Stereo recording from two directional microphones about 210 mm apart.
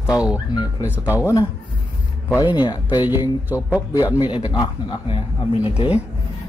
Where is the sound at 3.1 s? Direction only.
10° right (ahead or behind).